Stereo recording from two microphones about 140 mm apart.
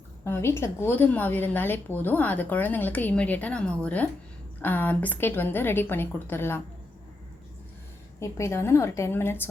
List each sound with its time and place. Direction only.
0.6 s a woman's voice: 15° left (ahead or behind)
8.2 s a woman's voice: 20° left (ahead or behind)